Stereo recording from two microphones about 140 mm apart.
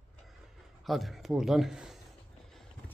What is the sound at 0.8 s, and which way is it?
Speech, centre (ahead or behind).